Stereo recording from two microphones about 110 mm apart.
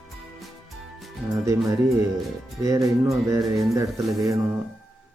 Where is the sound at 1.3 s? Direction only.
30° right (ahead or behind).